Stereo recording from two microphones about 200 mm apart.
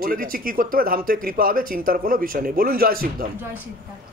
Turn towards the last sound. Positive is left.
turn(degrees=-45)  # may be behind; listen again after turning